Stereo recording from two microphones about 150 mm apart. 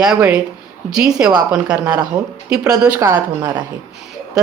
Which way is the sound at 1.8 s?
25° right (ahead or behind).